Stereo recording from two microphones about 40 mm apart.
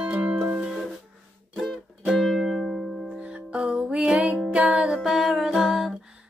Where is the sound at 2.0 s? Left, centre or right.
Centre.